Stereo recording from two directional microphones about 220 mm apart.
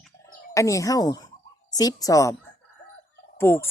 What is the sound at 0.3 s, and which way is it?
Speech, 15° left (ahead or behind).